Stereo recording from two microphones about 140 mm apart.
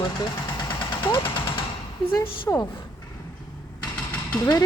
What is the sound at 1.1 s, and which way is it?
Speech, 40° left (ahead or behind).